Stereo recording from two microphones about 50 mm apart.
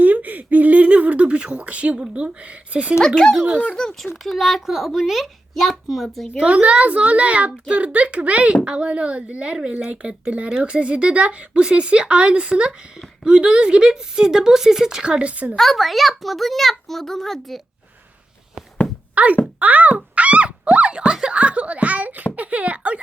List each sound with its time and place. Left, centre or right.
0.0 s a sound: right
2.7 s a child's voice: right
3.2 s a child's voice: centre
6.4 s a child's voice: right
15.5 s a child's voice: centre
19.1 s speech: right